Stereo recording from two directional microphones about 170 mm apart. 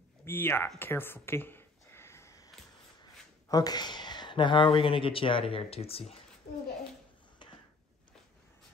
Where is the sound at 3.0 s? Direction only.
20° left (ahead or behind).